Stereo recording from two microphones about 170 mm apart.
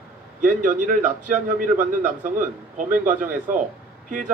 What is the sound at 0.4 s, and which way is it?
A man's voice, 50° right (ahead or behind).